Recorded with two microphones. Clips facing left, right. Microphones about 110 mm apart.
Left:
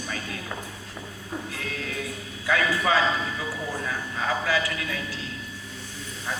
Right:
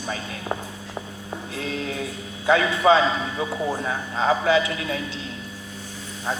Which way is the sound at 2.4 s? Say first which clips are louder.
Right 6 dB; 25° right (ahead or behind).